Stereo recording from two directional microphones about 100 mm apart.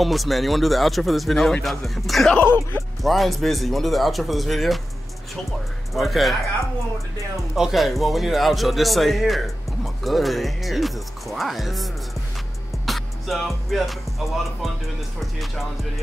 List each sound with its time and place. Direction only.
0.0 s a man's voice: centre (ahead or behind)
2.4 s speech: 20° left (ahead or behind)
3.0 s a man's voice: centre (ahead or behind)
5.9 s a man's voice: centre (ahead or behind)
7.5 s a man's voice: centre (ahead or behind)
12.8 s music: centre (ahead or behind)
13.7 s a man's voice: centre (ahead or behind)